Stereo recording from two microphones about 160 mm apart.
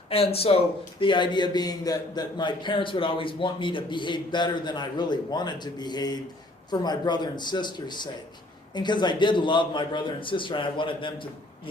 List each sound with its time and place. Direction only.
0.1 s speech: 35° left (ahead or behind)